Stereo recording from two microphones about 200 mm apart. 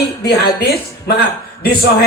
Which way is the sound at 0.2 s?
55° left (ahead or behind).